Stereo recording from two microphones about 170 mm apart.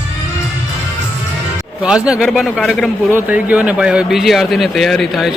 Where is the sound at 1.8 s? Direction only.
5° right (ahead or behind).